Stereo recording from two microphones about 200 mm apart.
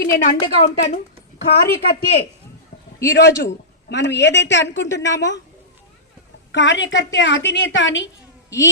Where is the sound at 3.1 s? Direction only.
60° left (ahead or behind).